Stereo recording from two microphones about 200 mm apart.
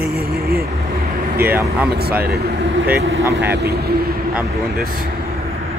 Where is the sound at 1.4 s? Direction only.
10° right (ahead or behind).